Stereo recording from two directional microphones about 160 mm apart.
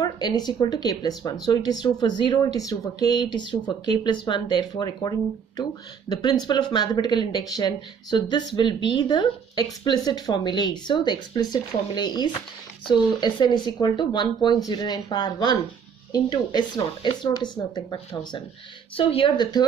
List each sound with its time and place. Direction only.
0.0 s speech: 25° left (ahead or behind)